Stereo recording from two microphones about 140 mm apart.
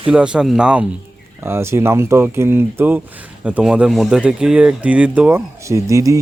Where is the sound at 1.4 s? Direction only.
15° right (ahead or behind).